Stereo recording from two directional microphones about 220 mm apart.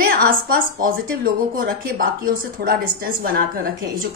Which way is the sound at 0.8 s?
40° right (ahead or behind).